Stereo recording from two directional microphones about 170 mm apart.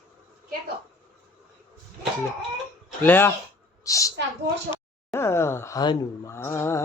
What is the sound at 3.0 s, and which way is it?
A child's voice, 10° left (ahead or behind).